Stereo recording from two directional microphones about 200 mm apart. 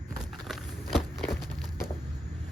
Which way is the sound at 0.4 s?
Centre (ahead or behind).